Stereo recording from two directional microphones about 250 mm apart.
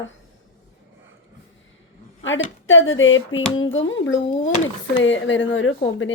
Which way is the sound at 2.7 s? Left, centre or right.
Left.